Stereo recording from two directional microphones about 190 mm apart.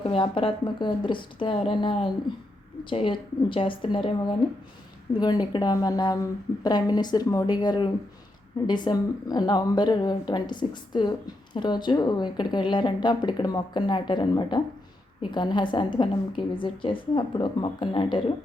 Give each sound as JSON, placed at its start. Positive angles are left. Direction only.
{"t": 0.1, "sound": "speech", "side_deg": 30}